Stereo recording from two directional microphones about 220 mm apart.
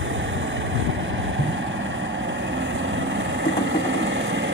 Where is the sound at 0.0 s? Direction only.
60° right (ahead or behind).